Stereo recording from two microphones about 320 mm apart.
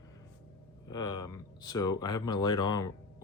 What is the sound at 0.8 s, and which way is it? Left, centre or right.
Speech, centre.